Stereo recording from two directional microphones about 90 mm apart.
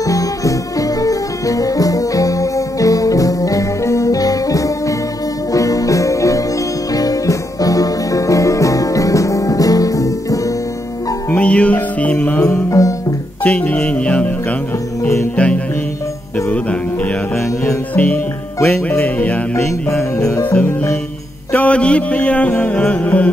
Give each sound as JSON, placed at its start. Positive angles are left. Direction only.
{"t": 0.0, "sound": "music", "side_deg": 40}
{"t": 11.2, "sound": "music", "side_deg": 15}
{"t": 12.4, "sound": "music", "side_deg": 35}
{"t": 13.4, "sound": "music", "side_deg": 15}
{"t": 15.3, "sound": "music", "side_deg": 15}
{"t": 17.9, "sound": "music", "side_deg": 15}
{"t": 19.9, "sound": "music", "side_deg": 30}
{"t": 21.5, "sound": "mantra", "side_deg": 15}